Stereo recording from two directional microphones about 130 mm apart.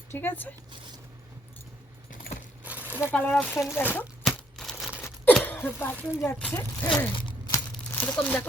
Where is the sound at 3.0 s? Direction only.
15° left (ahead or behind).